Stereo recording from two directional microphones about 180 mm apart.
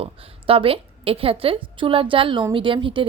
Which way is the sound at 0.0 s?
30° right (ahead or behind).